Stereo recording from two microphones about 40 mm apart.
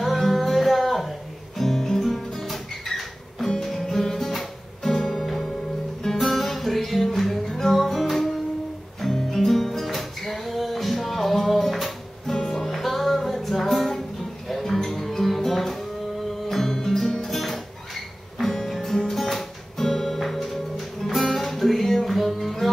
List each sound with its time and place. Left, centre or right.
0.2 s music: centre
3.6 s guitar: centre
6.0 s music: centre
12.4 s music: centre
12.6 s music: centre